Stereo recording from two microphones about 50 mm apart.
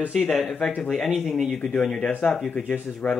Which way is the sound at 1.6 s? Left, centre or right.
Left.